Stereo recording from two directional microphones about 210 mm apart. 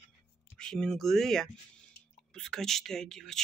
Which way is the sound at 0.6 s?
5° left (ahead or behind).